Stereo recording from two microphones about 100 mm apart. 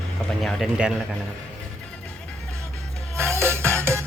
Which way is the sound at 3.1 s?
25° right (ahead or behind).